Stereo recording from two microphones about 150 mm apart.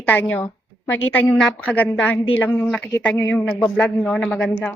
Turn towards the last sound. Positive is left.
turn(degrees=5)  # may be behind; listen again after turning